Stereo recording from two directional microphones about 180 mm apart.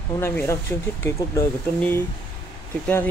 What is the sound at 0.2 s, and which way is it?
Speech, 15° left (ahead or behind).